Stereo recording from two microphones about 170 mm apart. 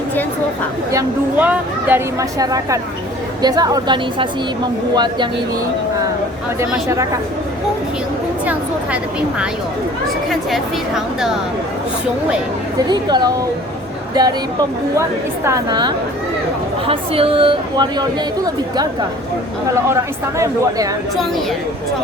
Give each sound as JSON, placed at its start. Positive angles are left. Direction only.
{"t": 0.9, "sound": "speech", "side_deg": -20}
{"t": 6.6, "sound": "speech", "side_deg": -20}
{"t": 10.2, "sound": "speech", "side_deg": 0}
{"t": 12.9, "sound": "speech", "side_deg": -25}
{"t": 15.4, "sound": "speech", "side_deg": -20}
{"t": 20.4, "sound": "speech", "side_deg": -20}